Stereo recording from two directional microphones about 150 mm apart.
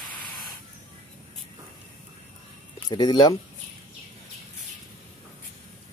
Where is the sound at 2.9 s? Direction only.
30° left (ahead or behind).